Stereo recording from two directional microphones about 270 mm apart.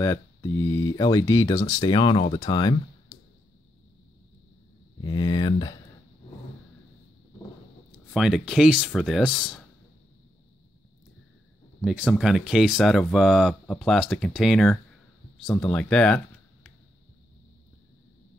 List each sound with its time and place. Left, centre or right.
0.0 s speech: centre
5.0 s speech: centre
8.1 s speech: centre
11.8 s speech: centre